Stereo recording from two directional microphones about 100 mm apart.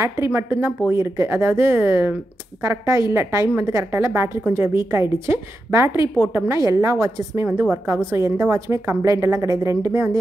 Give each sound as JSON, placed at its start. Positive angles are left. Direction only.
{"t": 0.0, "sound": "speech", "side_deg": -25}
{"t": 6.6, "sound": "a woman's voice", "side_deg": -35}